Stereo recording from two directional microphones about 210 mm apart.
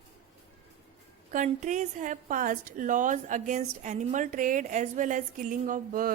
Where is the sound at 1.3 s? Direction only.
35° right (ahead or behind).